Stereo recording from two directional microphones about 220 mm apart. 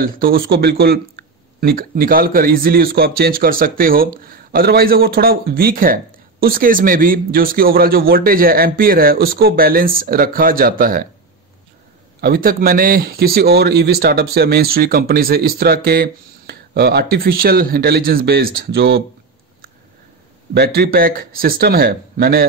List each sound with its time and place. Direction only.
0.0 s a man's voice: 45° right (ahead or behind)
12.2 s speech: 40° right (ahead or behind)
20.5 s speech: 45° right (ahead or behind)